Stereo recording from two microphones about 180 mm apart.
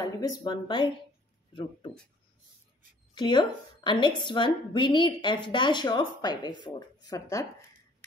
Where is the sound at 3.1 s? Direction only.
25° left (ahead or behind).